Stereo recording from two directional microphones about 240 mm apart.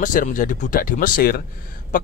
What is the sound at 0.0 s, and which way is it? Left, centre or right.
Speech, left.